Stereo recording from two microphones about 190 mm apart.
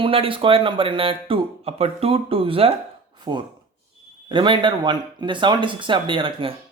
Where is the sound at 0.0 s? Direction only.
30° right (ahead or behind).